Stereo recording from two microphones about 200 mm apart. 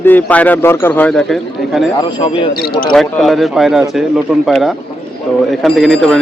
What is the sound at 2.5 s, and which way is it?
Speech, 50° left (ahead or behind).